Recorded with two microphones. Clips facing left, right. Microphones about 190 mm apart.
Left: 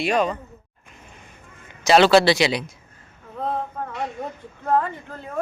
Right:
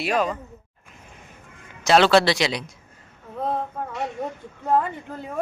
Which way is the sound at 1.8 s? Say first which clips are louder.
Left 2 dB; centre (ahead or behind).